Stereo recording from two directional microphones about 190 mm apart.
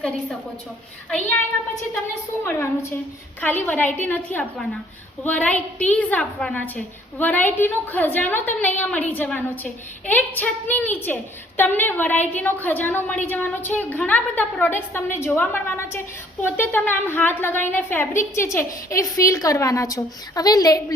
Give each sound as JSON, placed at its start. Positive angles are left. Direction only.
{"t": 2.4, "sound": "a woman's voice", "side_deg": 10}